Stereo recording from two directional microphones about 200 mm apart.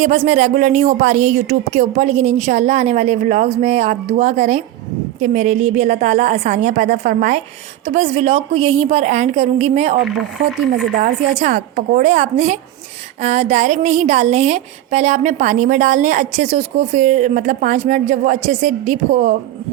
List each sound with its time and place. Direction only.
0.0 s speech: 35° right (ahead or behind)
11.3 s speech: 35° right (ahead or behind)